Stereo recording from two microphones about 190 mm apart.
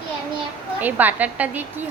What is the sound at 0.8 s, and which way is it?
A woman's voice, 10° right (ahead or behind).